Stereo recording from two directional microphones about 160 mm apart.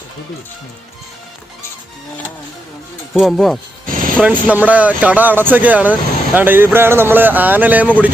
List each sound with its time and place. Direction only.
3.2 s speech: centre (ahead or behind)
3.8 s speech: 60° right (ahead or behind)
4.5 s speech: 10° right (ahead or behind)